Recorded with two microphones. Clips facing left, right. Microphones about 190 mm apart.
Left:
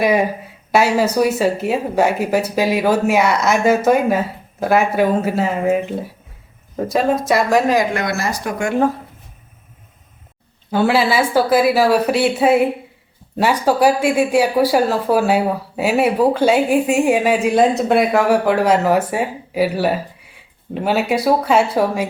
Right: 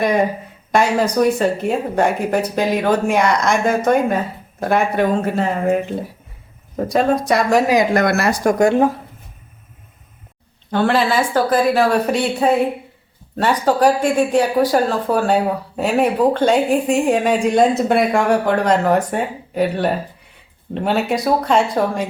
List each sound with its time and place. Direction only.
0.0 s speech: 5° left (ahead or behind)
7.9 s speech: 60° right (ahead or behind)
8.4 s speech: 40° right (ahead or behind)
10.7 s speech: 5° left (ahead or behind)